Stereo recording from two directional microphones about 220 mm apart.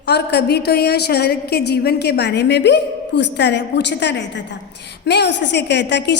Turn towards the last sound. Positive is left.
turn(degrees=50)  # may be behind; listen again after turning